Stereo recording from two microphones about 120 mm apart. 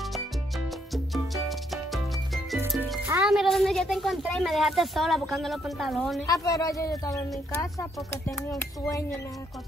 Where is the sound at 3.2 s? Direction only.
Centre (ahead or behind).